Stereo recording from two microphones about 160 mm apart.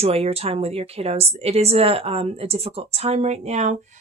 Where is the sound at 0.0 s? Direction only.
40° right (ahead or behind).